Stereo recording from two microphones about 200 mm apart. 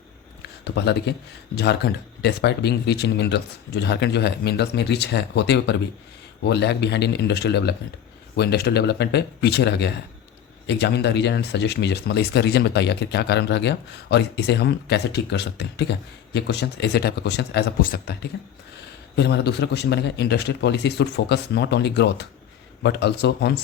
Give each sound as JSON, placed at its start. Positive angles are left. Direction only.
{"t": 0.6, "sound": "speech", "side_deg": 55}